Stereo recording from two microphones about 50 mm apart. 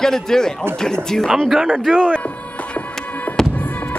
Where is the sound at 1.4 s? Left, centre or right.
Centre.